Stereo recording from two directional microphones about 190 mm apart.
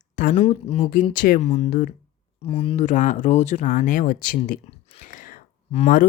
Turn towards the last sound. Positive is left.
turn(degrees=40)  # may be behind; listen again after turning